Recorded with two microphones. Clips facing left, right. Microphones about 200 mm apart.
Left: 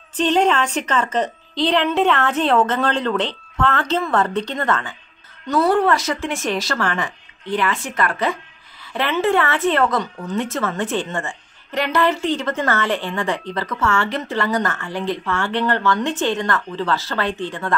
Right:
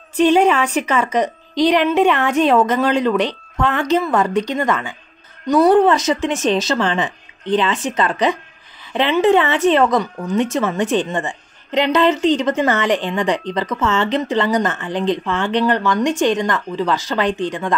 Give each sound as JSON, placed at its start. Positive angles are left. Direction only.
{"t": 0.1, "sound": "a woman's voice", "side_deg": -10}